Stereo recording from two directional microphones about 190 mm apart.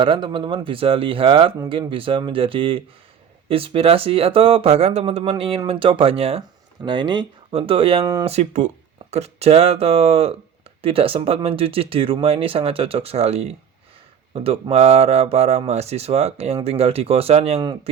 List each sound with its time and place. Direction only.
0.0 s speech: 25° right (ahead or behind)
1.5 s speech: 20° right (ahead or behind)